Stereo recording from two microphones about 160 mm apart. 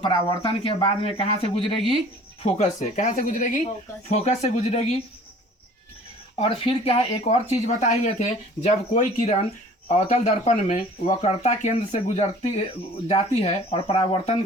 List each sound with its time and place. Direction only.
0.0 s speech: 30° left (ahead or behind)
2.4 s speech: 45° left (ahead or behind)
4.1 s speech: 45° left (ahead or behind)
6.3 s speech: 40° left (ahead or behind)